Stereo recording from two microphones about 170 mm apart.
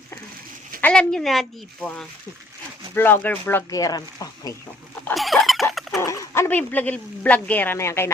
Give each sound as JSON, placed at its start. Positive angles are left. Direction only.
{"t": 0.8, "sound": "speech", "side_deg": 5}
{"t": 5.1, "sound": "a sound", "side_deg": 0}
{"t": 6.0, "sound": "speech", "side_deg": 15}